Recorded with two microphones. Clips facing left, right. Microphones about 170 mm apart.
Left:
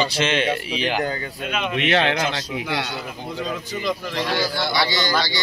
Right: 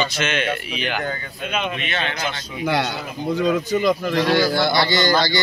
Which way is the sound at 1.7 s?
75° left (ahead or behind).